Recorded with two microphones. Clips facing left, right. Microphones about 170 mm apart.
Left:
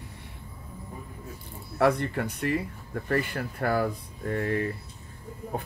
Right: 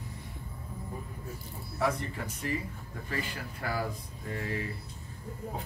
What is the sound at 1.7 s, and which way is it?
Speech, 65° left (ahead or behind).